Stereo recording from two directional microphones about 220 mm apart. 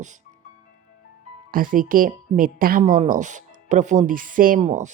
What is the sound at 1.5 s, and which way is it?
Speech, 40° right (ahead or behind).